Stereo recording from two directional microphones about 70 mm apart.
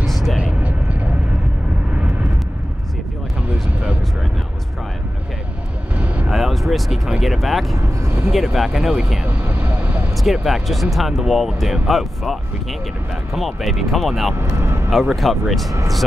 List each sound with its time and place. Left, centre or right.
0.0 s vehicle: centre
0.4 s vehicle: centre
5.9 s vehicle: centre
6.3 s vehicle: centre
8.5 s speech: centre
9.2 s vehicle: right
10.1 s speech: centre
14.3 s speech: right
14.9 s speech: centre